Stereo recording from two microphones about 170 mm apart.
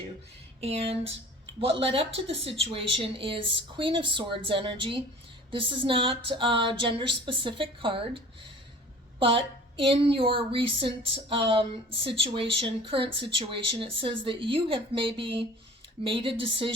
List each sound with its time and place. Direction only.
0.6 s a woman's voice: 35° right (ahead or behind)